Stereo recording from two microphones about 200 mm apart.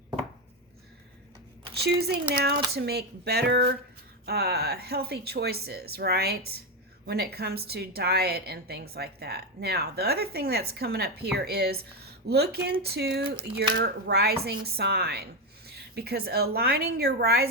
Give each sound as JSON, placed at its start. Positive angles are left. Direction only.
{"t": 1.7, "sound": "a woman's voice", "side_deg": -55}